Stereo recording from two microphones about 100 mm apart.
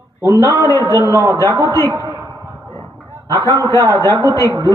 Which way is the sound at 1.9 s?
35° right (ahead or behind).